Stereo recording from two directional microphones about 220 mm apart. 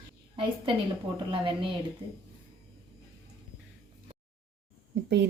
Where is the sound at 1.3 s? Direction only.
25° right (ahead or behind).